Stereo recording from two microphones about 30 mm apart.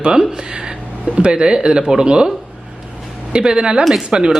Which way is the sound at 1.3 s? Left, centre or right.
Right.